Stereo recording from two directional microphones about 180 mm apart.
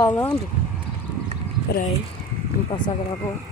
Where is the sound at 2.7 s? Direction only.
25° left (ahead or behind).